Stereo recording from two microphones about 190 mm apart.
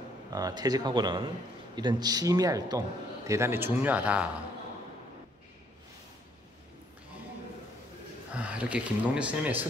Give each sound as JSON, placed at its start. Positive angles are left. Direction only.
{"t": 0.3, "sound": "speech", "side_deg": -20}
{"t": 8.3, "sound": "speech", "side_deg": -5}